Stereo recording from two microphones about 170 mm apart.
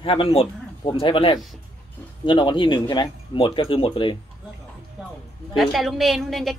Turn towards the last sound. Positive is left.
turn(degrees=0)  # may be behind; listen again after turning